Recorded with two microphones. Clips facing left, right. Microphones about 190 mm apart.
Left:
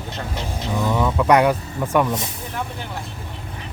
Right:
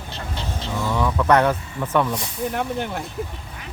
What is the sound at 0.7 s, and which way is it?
Speech, 20° left (ahead or behind).